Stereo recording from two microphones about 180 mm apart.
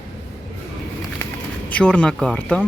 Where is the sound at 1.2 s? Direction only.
10° left (ahead or behind).